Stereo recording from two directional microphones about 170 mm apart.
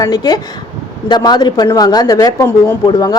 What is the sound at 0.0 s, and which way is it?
A woman's voice, 20° left (ahead or behind).